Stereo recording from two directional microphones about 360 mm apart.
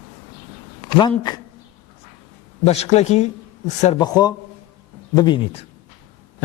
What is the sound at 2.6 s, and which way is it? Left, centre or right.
A man's voice, centre.